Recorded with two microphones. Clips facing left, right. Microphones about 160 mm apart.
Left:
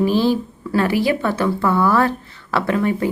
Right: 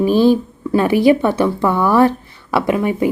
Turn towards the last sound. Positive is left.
turn(degrees=-15)  # may be behind; listen again after turning